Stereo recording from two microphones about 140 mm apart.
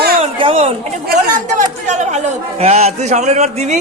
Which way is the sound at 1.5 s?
55° right (ahead or behind).